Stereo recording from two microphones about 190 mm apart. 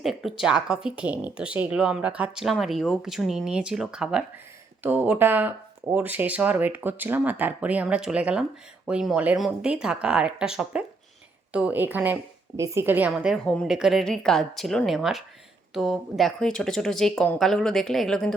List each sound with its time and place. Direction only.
0.0 s speech: centre (ahead or behind)